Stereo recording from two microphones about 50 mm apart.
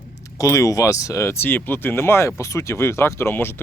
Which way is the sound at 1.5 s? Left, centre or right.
Left.